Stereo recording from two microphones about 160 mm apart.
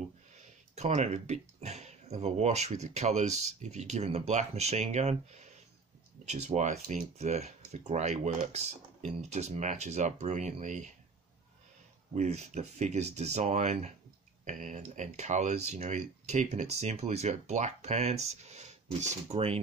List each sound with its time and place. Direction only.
0.7 s speech: 45° right (ahead or behind)
12.2 s speech: 45° right (ahead or behind)